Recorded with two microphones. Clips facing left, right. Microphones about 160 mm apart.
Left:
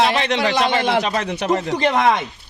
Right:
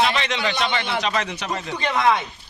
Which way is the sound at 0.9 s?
50° left (ahead or behind).